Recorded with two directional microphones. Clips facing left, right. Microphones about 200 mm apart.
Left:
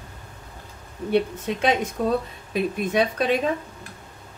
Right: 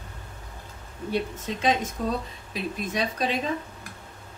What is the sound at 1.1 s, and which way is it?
A woman's voice, 65° left (ahead or behind).